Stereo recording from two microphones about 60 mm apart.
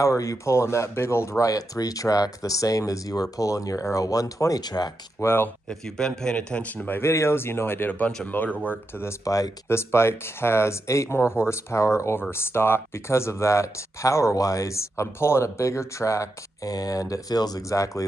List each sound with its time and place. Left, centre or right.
0.0 s speech: left
1.4 s speech: left
4.8 s speech: left
5.2 s speech: left
5.7 s speech: centre; by 7.0 s left
7.0 s speech: left
9.2 s speech: left
9.7 s speech: left